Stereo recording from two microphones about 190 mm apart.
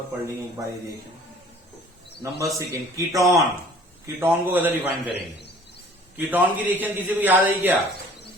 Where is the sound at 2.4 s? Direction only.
15° right (ahead or behind).